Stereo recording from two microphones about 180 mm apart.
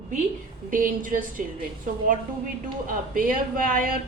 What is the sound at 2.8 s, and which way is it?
A woman's voice, 50° right (ahead or behind).